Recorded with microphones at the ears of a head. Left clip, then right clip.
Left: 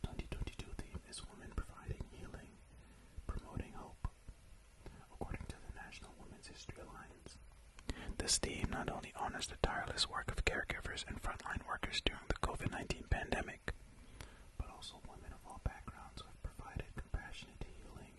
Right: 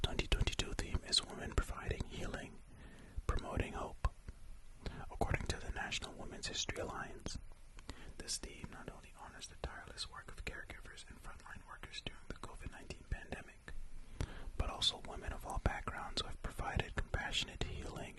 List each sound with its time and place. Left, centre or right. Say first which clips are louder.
0.0 s whispering: right 11 dB; right
7.9 s speech: left 7 dB; left
14.2 s whispering: right 9 dB; right